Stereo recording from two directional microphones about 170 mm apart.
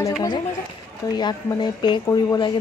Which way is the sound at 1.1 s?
25° left (ahead or behind).